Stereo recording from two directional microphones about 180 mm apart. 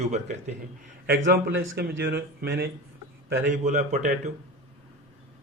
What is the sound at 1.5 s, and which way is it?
Speech, 90° right.